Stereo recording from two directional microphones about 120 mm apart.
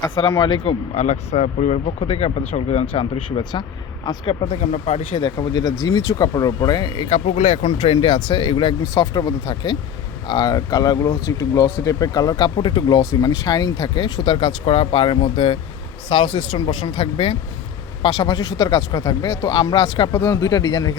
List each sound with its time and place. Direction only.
0.4 s speech: 50° left (ahead or behind)
2.9 s speech: 45° left (ahead or behind)
4.5 s speech: 65° left (ahead or behind)
5.2 s speech: 35° left (ahead or behind)
7.1 s speech: 70° left (ahead or behind); by 12.5 s 30° left (ahead or behind)
12.5 s speech: 45° left (ahead or behind)
13.0 s speech: 30° left (ahead or behind); by 17.3 s 50° left (ahead or behind)
18.0 s speech: 35° left (ahead or behind)